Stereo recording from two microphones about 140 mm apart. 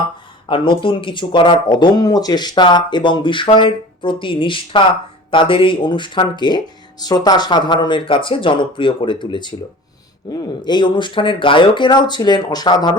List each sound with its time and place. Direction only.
0.4 s speech: 40° left (ahead or behind)